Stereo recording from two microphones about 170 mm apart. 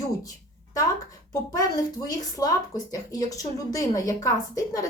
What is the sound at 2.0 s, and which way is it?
Speech, 20° left (ahead or behind).